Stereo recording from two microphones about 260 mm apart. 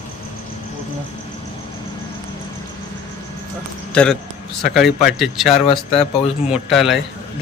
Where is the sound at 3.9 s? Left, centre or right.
Centre.